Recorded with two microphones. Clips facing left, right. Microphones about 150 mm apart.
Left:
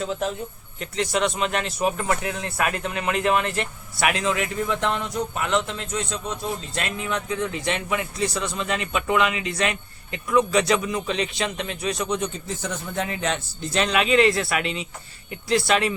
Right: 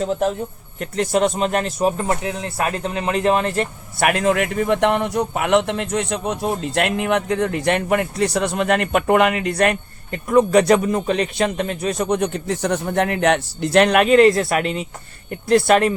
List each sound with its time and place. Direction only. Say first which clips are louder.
0.0 s speech: right 6 dB; 40° right (ahead or behind)